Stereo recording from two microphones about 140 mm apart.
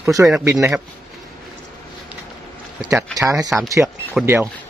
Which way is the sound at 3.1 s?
25° right (ahead or behind).